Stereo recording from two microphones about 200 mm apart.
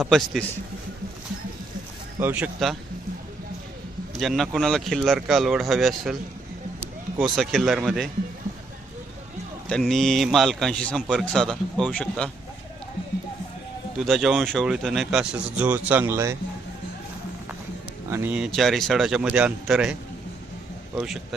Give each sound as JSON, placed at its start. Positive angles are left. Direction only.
{"t": 0.0, "sound": "a man's voice", "side_deg": 0}
{"t": 2.1, "sound": "speech", "side_deg": -10}
{"t": 4.2, "sound": "a man's voice", "side_deg": 0}
{"t": 7.2, "sound": "a man's voice", "side_deg": 0}
{"t": 9.6, "sound": "a man's voice", "side_deg": 0}
{"t": 14.0, "sound": "a man's voice", "side_deg": 0}
{"t": 18.1, "sound": "a man's voice", "side_deg": -10}